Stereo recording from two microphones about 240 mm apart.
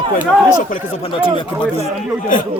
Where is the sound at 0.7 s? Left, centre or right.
Left.